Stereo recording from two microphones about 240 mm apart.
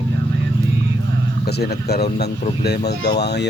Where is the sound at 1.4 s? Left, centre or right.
Left.